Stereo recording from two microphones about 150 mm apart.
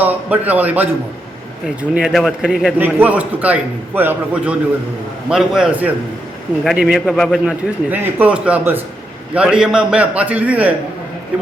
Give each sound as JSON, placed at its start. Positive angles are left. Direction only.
{"t": 0.0, "sound": "a man's voice", "side_deg": -10}
{"t": 7.0, "sound": "a man's voice", "side_deg": 10}
{"t": 7.3, "sound": "a man's voice", "side_deg": -10}